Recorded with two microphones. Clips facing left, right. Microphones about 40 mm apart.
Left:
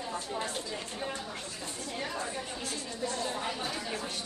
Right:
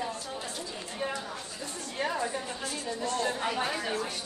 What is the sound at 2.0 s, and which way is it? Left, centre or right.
Speech, right.